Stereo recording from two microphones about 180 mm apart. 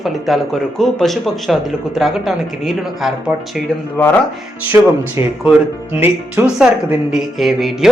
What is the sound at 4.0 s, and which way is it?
Speech, 15° left (ahead or behind).